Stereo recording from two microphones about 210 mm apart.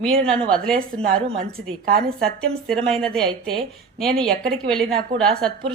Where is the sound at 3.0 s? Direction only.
5° left (ahead or behind).